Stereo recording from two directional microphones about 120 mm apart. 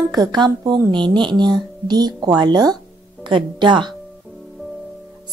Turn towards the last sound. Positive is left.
turn(degrees=-40)  # may be behind; listen again after turning